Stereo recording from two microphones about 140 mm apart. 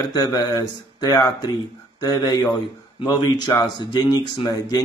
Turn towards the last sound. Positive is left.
turn(degrees=25)  # may be behind; listen again after turning